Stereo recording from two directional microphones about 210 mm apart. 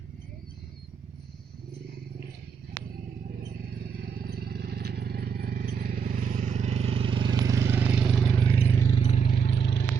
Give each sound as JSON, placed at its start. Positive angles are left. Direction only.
{"t": 4.2, "sound": "vehicle", "side_deg": -45}
{"t": 8.4, "sound": "vehicle", "side_deg": 25}
{"t": 9.6, "sound": "vehicle", "side_deg": 55}